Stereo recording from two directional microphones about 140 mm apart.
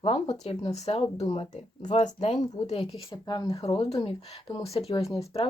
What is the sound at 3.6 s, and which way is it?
Speech, 45° left (ahead or behind).